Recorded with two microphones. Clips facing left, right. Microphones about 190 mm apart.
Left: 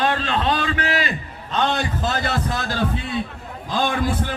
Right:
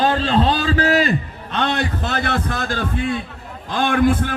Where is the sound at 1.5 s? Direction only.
65° right (ahead or behind).